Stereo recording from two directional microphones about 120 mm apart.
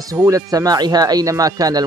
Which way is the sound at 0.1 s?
30° right (ahead or behind).